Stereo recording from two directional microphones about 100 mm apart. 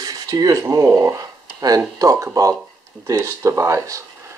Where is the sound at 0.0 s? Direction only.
40° right (ahead or behind).